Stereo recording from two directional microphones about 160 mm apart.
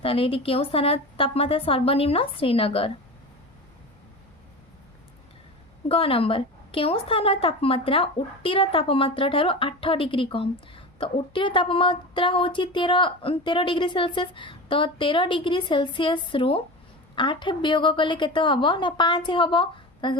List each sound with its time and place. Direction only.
0.0 s a woman's voice: 35° left (ahead or behind)
5.9 s a woman's voice: 35° left (ahead or behind)